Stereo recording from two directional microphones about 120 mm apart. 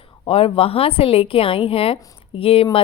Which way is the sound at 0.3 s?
50° left (ahead or behind).